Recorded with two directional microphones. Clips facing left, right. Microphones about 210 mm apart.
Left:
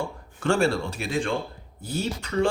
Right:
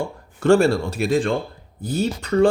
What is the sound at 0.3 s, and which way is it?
A man's voice, 40° right (ahead or behind).